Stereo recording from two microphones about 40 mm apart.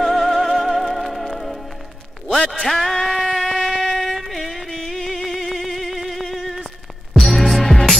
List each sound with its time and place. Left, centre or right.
0.0 s music: centre
2.2 s a man's voice: centre
2.7 s a sound: centre
7.2 s music: centre